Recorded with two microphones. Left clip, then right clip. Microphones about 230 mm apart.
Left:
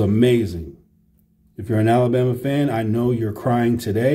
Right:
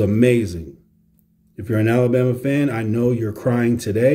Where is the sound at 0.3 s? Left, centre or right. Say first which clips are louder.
Right 1 dB; centre.